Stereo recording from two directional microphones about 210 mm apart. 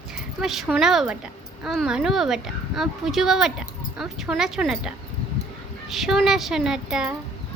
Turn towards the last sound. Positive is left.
turn(degrees=-5)  # may be behind; listen again after turning